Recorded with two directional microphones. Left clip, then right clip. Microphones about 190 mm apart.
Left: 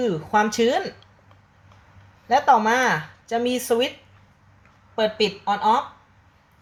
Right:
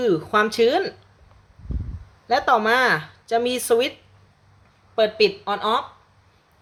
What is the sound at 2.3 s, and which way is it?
Speech, 20° right (ahead or behind).